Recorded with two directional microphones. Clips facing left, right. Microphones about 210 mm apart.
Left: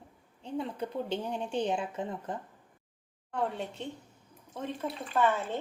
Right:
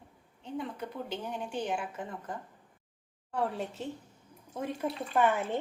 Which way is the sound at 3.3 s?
Centre (ahead or behind).